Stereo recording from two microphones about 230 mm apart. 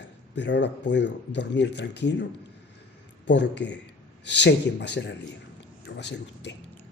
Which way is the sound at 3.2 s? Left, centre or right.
Left.